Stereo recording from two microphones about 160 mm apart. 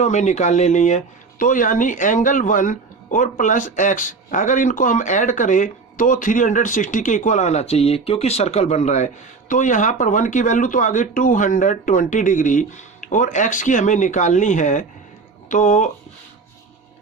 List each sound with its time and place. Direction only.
0.0 s speech: 45° left (ahead or behind)